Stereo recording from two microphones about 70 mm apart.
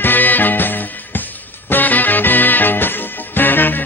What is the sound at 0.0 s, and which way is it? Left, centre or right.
Music, left.